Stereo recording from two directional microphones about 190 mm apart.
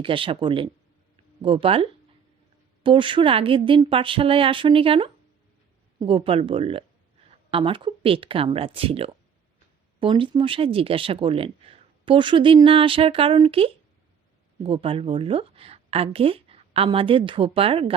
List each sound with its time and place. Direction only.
0.0 s a woman's voice: 25° right (ahead or behind)